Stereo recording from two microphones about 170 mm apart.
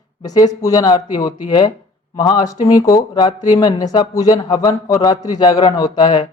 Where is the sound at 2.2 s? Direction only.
25° left (ahead or behind).